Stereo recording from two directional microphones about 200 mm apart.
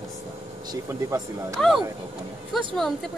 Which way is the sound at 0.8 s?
15° right (ahead or behind).